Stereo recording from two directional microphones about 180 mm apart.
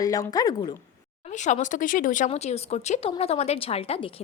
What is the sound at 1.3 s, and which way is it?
A woman's voice, 40° left (ahead or behind).